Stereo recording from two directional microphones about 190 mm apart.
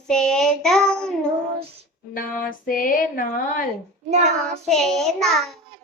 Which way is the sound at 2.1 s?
45° left (ahead or behind).